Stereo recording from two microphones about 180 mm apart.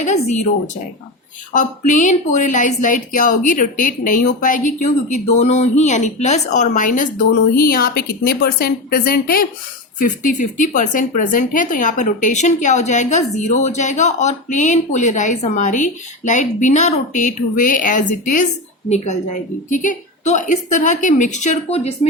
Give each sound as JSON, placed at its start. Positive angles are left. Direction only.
{"t": 0.0, "sound": "speech", "side_deg": 40}
{"t": 1.5, "sound": "a woman's voice", "side_deg": 45}